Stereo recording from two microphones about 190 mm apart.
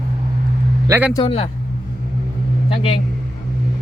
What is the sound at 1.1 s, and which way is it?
Speech, 30° left (ahead or behind).